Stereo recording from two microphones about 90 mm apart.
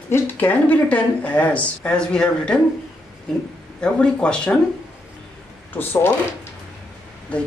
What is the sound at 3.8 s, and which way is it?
Speech, 10° left (ahead or behind).